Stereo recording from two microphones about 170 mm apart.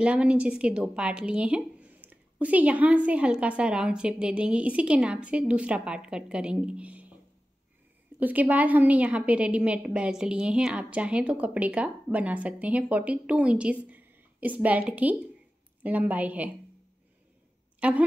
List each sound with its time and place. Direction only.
0.0 s a woman's voice: 5° right (ahead or behind)
8.2 s a woman's voice: 10° right (ahead or behind)
17.7 s a woman's voice: 5° right (ahead or behind)